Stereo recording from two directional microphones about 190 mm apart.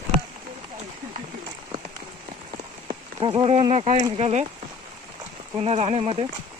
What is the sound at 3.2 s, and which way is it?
Speech, 30° right (ahead or behind).